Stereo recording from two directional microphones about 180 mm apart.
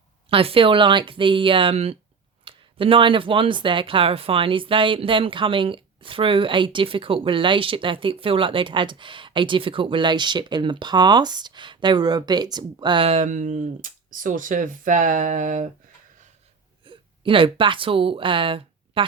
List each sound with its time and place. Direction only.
0.3 s speech: 30° right (ahead or behind)
16.8 s a woman's voice: 30° right (ahead or behind)